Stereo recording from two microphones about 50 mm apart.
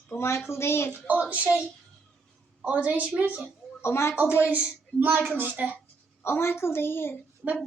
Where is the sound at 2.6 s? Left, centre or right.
Right.